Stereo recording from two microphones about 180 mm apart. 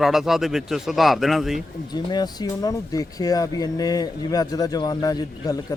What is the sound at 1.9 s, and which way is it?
Speech, 25° left (ahead or behind).